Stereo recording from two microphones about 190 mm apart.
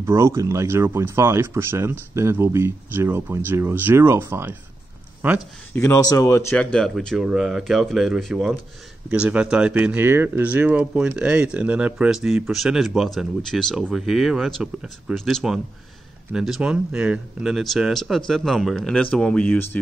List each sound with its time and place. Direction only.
0.0 s speech: 15° right (ahead or behind)
5.7 s speech: 15° left (ahead or behind)
6.2 s speech: 5° left (ahead or behind)